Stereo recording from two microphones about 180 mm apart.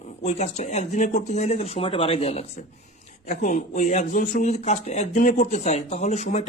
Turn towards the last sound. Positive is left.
turn(degrees=40)  # may be behind; listen again after turning